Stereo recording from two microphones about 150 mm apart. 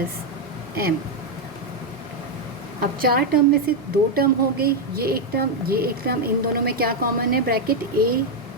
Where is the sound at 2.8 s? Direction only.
75° right (ahead or behind).